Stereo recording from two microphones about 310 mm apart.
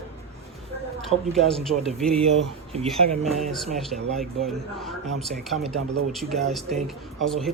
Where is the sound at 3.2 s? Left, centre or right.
Centre.